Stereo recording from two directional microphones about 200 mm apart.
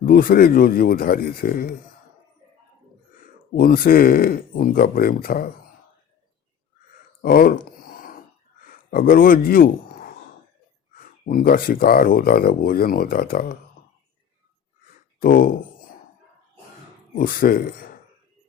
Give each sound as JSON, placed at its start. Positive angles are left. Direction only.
{"t": 0.0, "sound": "speech", "side_deg": 45}
{"t": 3.5, "sound": "speech", "side_deg": 45}
{"t": 7.2, "sound": "a sound", "side_deg": 50}
{"t": 8.9, "sound": "a man's voice", "side_deg": 45}
{"t": 11.3, "sound": "speech", "side_deg": 45}
{"t": 15.2, "sound": "speech", "side_deg": 45}
{"t": 17.2, "sound": "speech", "side_deg": 45}